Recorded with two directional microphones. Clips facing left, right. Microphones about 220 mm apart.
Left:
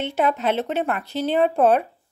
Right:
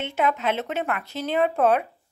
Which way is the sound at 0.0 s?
35° left (ahead or behind).